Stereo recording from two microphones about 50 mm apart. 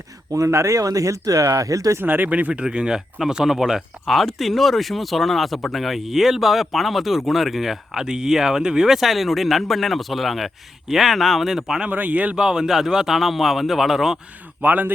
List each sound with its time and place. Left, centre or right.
0.4 s speech: right
2.0 s speech: right
2.5 s a man's voice: centre
11.9 s speech: right
12.4 s a man's voice: centre
14.6 s speech: right